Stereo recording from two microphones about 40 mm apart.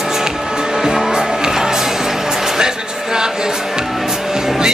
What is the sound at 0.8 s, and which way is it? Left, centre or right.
Music, centre.